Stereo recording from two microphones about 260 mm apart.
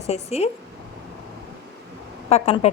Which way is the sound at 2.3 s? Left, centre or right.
Left.